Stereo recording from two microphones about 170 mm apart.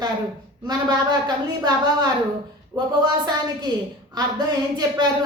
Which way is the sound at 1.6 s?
25° right (ahead or behind).